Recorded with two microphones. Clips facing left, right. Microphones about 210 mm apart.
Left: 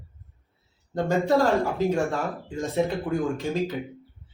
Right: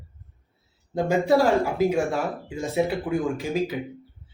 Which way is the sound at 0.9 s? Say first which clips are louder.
Right 2 dB; 15° right (ahead or behind).